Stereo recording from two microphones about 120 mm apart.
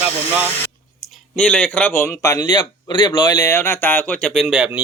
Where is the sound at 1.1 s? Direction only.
10° left (ahead or behind).